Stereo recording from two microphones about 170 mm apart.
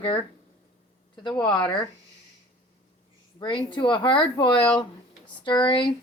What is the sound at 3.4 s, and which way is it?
Speech, 30° left (ahead or behind).